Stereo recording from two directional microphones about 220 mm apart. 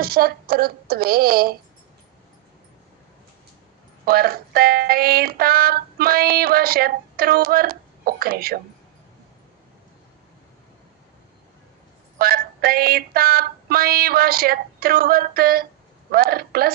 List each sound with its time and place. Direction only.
0.0 s speech: 45° right (ahead or behind)
4.0 s speech: 45° right (ahead or behind)
12.2 s speech: 45° right (ahead or behind)